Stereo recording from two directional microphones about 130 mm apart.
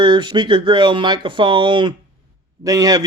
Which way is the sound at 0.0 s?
35° right (ahead or behind).